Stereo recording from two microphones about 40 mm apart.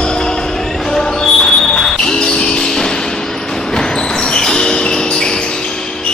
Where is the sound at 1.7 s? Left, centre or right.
Centre.